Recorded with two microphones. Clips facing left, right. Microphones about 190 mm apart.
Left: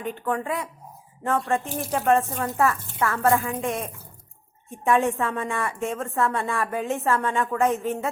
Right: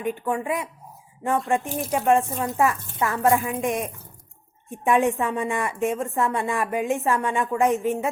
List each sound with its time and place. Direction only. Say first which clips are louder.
0.0 s a woman's voice: right 2 dB; 10° right (ahead or behind)